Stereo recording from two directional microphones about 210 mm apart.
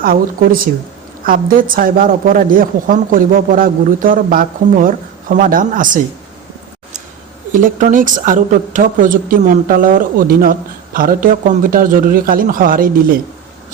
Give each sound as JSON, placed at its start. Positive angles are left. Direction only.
{"t": 0.0, "sound": "a woman's voice", "side_deg": -45}
{"t": 7.5, "sound": "a woman's voice", "side_deg": -40}